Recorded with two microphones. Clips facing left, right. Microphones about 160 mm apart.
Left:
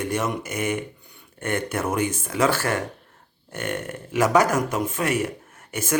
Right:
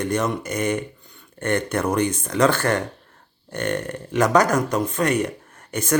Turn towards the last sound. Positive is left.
turn(degrees=5)  # may be behind; listen again after turning